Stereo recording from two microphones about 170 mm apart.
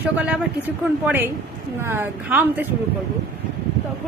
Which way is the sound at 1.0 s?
10° right (ahead or behind).